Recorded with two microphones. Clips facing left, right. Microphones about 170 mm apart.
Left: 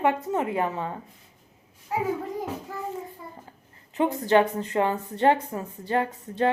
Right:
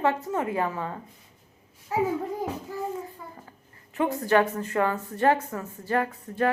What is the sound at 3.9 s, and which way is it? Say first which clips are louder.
A woman's voice: left 2 dB; 20° left (ahead or behind).